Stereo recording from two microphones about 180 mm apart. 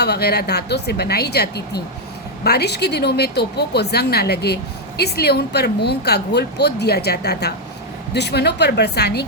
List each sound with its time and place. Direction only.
0.0 s a woman's voice: 65° left (ahead or behind)